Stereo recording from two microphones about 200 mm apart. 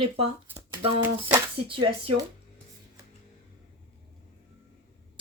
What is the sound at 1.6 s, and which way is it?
Speech, 25° right (ahead or behind).